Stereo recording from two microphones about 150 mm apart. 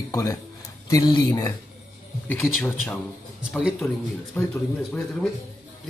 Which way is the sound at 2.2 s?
10° left (ahead or behind).